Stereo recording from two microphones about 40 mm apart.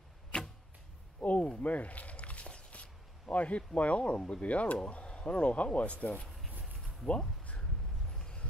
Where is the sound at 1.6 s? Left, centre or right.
Left.